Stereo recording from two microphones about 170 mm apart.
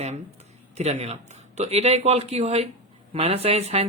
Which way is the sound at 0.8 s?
40° right (ahead or behind).